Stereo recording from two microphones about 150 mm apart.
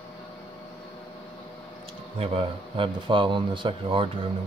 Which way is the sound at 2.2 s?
35° right (ahead or behind).